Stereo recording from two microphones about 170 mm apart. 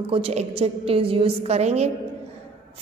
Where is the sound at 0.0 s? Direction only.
35° right (ahead or behind).